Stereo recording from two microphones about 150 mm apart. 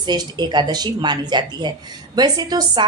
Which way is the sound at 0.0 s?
30° right (ahead or behind).